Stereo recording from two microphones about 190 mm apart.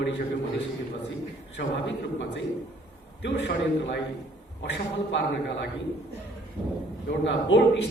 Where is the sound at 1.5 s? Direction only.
75° left (ahead or behind).